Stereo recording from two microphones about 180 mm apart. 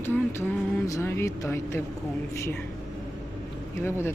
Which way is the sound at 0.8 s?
15° left (ahead or behind).